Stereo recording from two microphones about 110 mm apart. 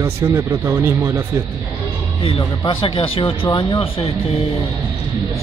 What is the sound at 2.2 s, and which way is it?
Speech, 60° left (ahead or behind).